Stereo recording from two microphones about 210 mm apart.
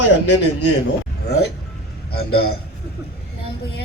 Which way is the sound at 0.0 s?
90° left.